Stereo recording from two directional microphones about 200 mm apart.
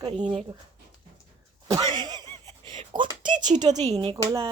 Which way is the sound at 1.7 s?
20° right (ahead or behind).